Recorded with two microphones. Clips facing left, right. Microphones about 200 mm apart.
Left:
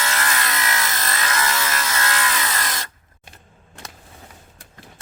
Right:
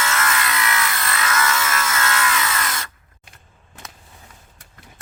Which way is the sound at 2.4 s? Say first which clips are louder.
Right 2 dB; 40° left (ahead or behind).